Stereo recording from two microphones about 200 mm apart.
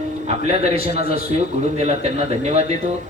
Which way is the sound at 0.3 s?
30° right (ahead or behind).